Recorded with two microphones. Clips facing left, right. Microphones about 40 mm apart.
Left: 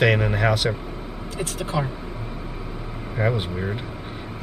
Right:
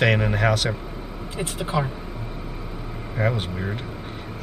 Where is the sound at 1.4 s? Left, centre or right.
Right.